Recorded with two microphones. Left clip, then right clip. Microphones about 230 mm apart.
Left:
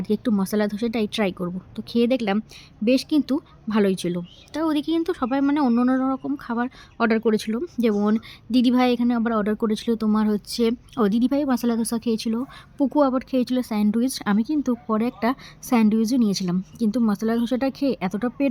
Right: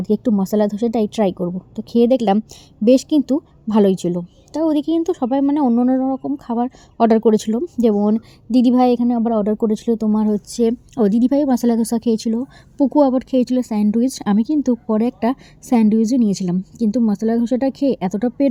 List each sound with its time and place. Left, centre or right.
0.0 s a woman's voice: centre
6.1 s speech: left
6.5 s a woman's voice: centre